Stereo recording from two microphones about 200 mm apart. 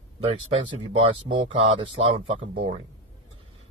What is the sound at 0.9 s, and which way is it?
Speech, 25° right (ahead or behind).